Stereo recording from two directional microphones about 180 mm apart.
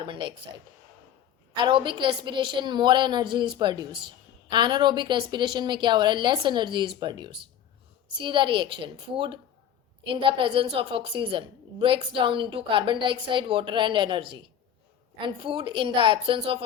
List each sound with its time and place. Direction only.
0.0 s a woman's voice: 25° right (ahead or behind)
1.5 s a woman's voice: 25° right (ahead or behind)